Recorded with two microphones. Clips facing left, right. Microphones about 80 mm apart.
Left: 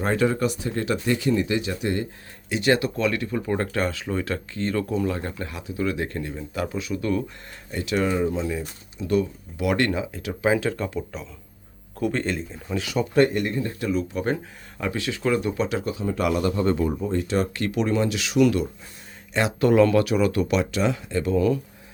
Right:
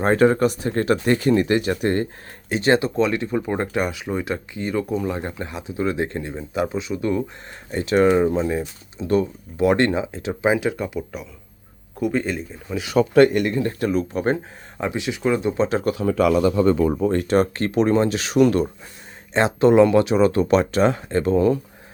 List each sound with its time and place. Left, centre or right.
0.0 s speech: right
2.5 s speech: right
7.7 s speech: right
8.0 s speech: right; by 12.8 s centre
13.0 s speech: right
13.7 s speech: right
14.8 s speech: centre
15.8 s speech: right